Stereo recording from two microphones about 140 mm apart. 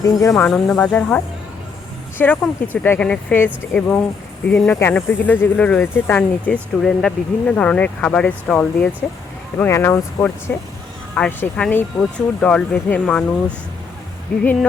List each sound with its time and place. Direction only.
0.0 s speech: 25° left (ahead or behind)
0.4 s speech: 5° left (ahead or behind)
14.3 s speech: 10° left (ahead or behind)